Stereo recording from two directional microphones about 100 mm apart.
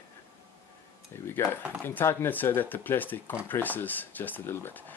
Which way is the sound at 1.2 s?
25° left (ahead or behind).